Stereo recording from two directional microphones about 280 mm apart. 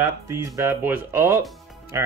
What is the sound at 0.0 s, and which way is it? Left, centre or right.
Speech, centre.